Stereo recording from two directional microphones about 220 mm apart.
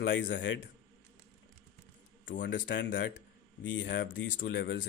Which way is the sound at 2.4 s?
55° left (ahead or behind).